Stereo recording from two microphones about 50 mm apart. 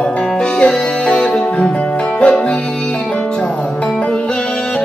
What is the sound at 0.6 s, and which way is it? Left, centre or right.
Music, left.